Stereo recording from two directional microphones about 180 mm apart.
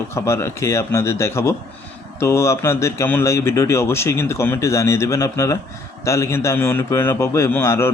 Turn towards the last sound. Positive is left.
turn(degrees=15)  # may be behind; listen again after turning